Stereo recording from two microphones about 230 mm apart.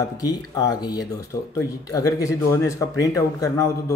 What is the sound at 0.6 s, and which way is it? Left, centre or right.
Speech, centre.